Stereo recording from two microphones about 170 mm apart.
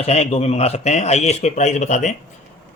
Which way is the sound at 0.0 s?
40° left (ahead or behind).